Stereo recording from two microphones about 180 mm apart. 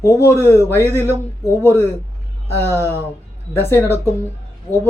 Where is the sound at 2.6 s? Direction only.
15° left (ahead or behind).